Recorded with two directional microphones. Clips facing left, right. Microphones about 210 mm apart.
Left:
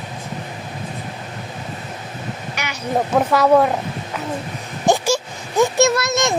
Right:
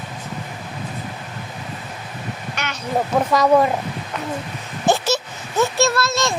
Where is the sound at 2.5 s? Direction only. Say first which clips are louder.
Left 1 dB; 10° left (ahead or behind).